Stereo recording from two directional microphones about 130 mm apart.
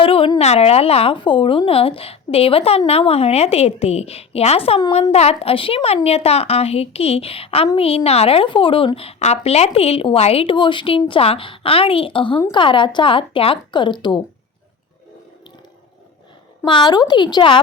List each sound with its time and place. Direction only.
0.0 s a sound: 45° left (ahead or behind)
0.3 s a woman's voice: 55° left (ahead or behind); by 14.2 s 35° left (ahead or behind)
16.6 s a woman's voice: 35° left (ahead or behind)